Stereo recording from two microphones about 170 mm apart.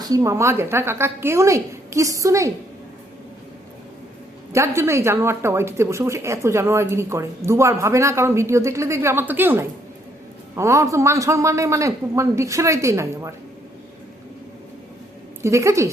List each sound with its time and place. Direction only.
0.0 s speech: 20° right (ahead or behind)
4.5 s speech: 15° right (ahead or behind)
15.4 s speech: 15° right (ahead or behind)